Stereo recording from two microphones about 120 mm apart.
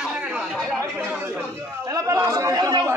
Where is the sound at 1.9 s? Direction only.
30° right (ahead or behind).